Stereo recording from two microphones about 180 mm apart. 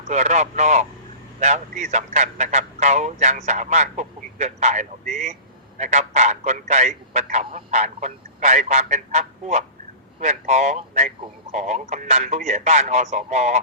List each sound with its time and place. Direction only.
0.0 s a man's voice: 40° right (ahead or behind)